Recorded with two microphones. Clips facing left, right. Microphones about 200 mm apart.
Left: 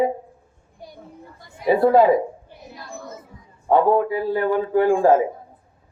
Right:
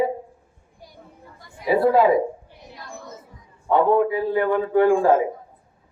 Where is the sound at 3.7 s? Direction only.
35° left (ahead or behind).